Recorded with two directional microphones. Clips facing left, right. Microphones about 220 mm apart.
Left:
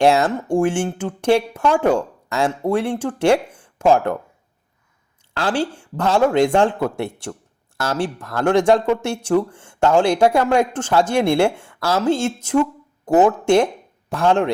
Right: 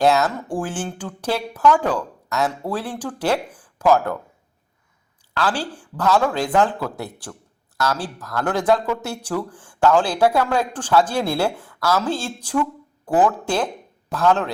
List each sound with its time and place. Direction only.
0.0 s speech: 25° left (ahead or behind)
5.4 s speech: 25° left (ahead or behind)